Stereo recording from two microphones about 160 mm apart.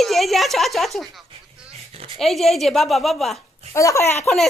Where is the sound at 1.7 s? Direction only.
40° right (ahead or behind).